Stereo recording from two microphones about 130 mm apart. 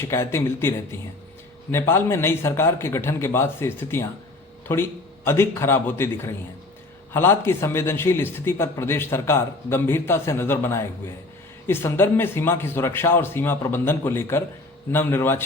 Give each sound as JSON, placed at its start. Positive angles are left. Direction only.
{"t": 0.0, "sound": "a man's voice", "side_deg": 20}